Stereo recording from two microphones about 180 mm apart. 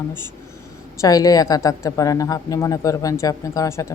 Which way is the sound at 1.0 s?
20° left (ahead or behind).